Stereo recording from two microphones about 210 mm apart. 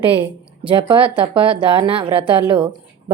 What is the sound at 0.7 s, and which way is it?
A woman's voice, 25° right (ahead or behind).